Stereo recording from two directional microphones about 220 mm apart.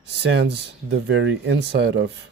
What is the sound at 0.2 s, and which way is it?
Speech, 50° right (ahead or behind).